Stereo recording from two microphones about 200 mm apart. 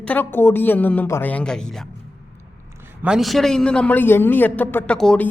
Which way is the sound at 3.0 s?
Centre (ahead or behind).